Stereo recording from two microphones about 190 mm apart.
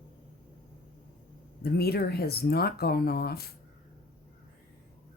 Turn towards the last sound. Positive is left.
turn(degrees=55)  # may be behind; listen again after turning